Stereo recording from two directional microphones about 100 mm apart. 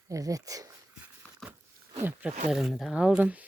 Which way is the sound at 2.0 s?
15° right (ahead or behind).